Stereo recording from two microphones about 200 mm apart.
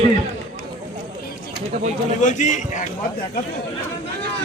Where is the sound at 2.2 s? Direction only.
40° left (ahead or behind).